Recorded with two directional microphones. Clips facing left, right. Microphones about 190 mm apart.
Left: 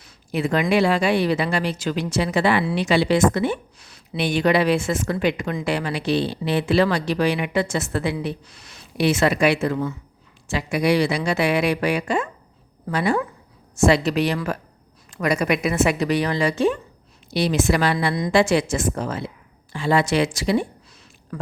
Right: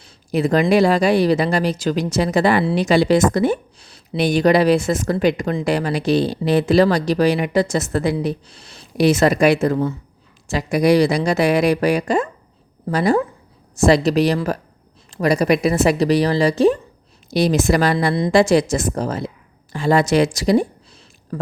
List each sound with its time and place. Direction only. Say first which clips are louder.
0.0 s speech: right 5 dB; 40° right (ahead or behind)